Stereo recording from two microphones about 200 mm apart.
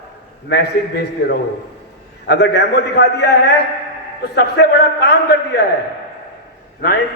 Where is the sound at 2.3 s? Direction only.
55° left (ahead or behind).